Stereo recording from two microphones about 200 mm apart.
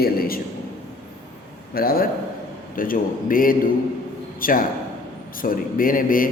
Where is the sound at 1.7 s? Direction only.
50° left (ahead or behind).